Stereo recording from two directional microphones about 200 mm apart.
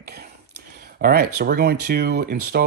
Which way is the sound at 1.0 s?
55° right (ahead or behind).